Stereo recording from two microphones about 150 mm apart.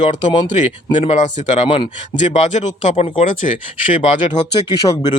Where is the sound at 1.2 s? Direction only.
55° left (ahead or behind).